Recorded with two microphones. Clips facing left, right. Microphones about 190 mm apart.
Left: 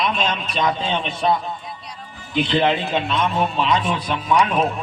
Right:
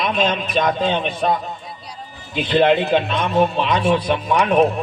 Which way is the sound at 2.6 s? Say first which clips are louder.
Right 5 dB; 60° right (ahead or behind).